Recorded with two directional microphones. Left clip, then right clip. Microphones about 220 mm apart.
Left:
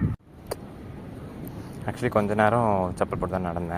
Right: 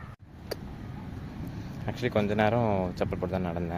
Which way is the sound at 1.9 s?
5° left (ahead or behind).